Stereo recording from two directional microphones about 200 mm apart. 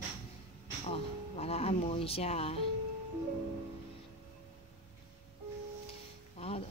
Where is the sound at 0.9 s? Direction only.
30° left (ahead or behind).